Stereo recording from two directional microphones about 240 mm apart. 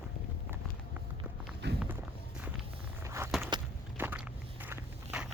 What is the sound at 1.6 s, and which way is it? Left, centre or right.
Walk, right.